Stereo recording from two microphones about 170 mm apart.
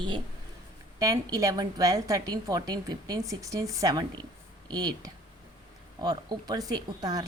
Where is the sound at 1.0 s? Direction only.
20° right (ahead or behind).